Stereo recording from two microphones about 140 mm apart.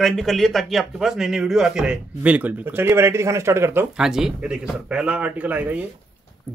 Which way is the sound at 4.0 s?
5° right (ahead or behind).